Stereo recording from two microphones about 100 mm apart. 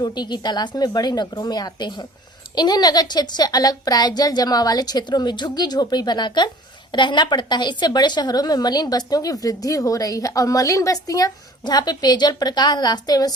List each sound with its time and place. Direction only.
0.0 s a woman's voice: 45° left (ahead or behind)